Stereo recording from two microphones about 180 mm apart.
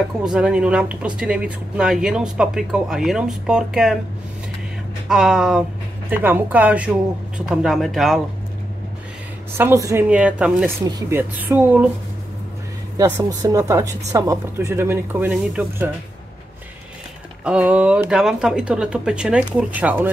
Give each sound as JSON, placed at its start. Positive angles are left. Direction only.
{"t": 0.2, "sound": "speech", "side_deg": -5}
{"t": 5.0, "sound": "speech", "side_deg": -5}
{"t": 9.6, "sound": "speech", "side_deg": -15}
{"t": 10.8, "sound": "speech", "side_deg": -20}
{"t": 12.9, "sound": "speech", "side_deg": -20}
{"t": 17.5, "sound": "speech", "side_deg": -5}